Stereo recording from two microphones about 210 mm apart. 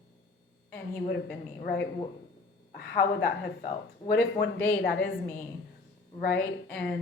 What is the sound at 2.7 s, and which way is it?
A woman's voice, 50° left (ahead or behind).